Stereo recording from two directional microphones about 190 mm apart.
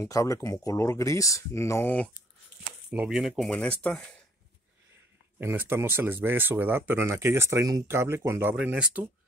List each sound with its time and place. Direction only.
0.0 s speech: 15° left (ahead or behind)
2.9 s speech: 5° right (ahead or behind)
5.4 s speech: 10° right (ahead or behind)